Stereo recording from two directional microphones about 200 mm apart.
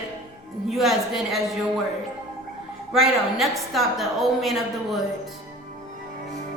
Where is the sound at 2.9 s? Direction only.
Centre (ahead or behind).